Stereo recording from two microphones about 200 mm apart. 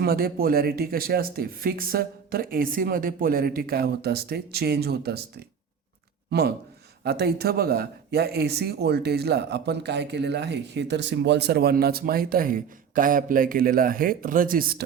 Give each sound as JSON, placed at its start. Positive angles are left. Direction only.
{"t": 0.0, "sound": "speech", "side_deg": -50}
{"t": 7.0, "sound": "speech", "side_deg": -55}